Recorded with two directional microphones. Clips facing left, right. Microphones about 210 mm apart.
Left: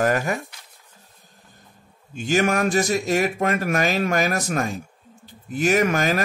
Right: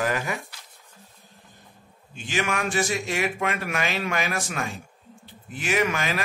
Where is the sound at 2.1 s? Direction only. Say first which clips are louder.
Left 7 dB; 45° left (ahead or behind).